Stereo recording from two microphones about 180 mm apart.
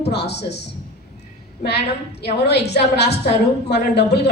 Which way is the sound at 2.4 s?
70° left (ahead or behind).